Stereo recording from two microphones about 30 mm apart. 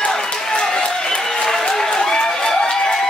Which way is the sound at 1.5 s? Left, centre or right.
Left.